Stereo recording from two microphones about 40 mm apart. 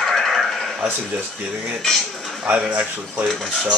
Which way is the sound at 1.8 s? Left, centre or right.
Centre.